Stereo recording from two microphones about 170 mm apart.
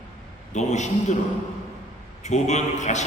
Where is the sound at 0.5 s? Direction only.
45° left (ahead or behind).